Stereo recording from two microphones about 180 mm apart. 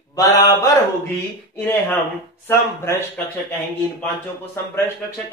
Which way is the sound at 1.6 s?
10° left (ahead or behind).